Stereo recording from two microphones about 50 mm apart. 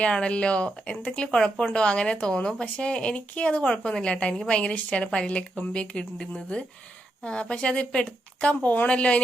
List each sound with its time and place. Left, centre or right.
0.0 s speech: left